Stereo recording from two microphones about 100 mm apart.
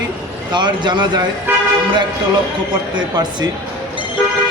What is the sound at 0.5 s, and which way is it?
Speech, 50° right (ahead or behind).